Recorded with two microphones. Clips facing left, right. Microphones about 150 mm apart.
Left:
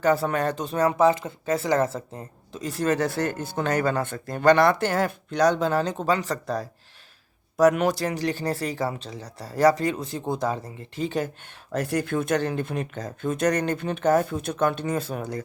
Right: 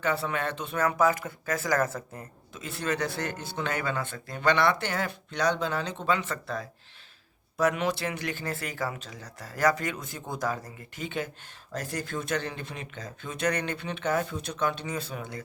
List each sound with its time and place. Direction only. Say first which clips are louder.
0.0 s speech: left 7 dB; 45° left (ahead or behind)
11.7 s speech: left 8 dB; 60° left (ahead or behind); by 15.4 s 45° left (ahead or behind)